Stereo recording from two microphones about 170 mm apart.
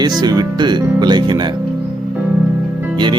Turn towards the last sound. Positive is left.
turn(degrees=-25)  # may be behind; listen again after turning